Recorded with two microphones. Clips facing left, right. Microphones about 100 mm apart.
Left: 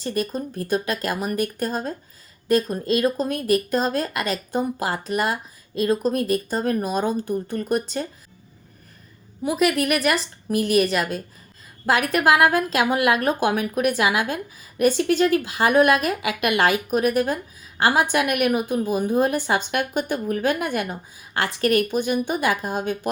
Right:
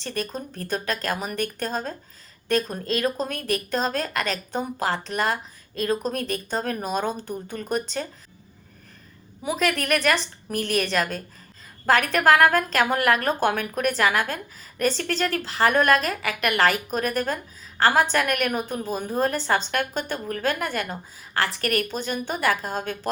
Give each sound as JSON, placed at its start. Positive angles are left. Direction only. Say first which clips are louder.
{"t": 0.0, "sound": "a woman's voice", "louder": "left 5 dB", "side_deg": 5}
{"t": 9.4, "sound": "a woman's voice", "louder": "left 4 dB", "side_deg": 5}